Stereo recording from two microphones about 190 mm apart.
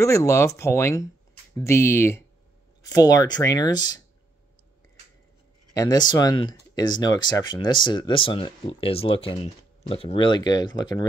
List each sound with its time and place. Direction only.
0.0 s speech: 15° left (ahead or behind)
5.8 s speech: 20° left (ahead or behind)